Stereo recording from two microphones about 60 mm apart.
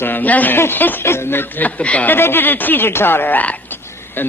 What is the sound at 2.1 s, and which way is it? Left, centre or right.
A woman's voice, left.